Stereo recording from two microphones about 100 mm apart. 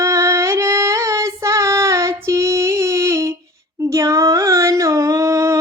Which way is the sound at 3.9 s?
30° right (ahead or behind).